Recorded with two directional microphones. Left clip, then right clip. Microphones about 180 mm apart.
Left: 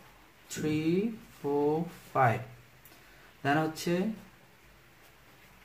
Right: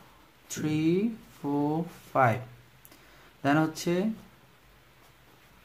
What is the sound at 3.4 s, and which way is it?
Speech, 45° right (ahead or behind).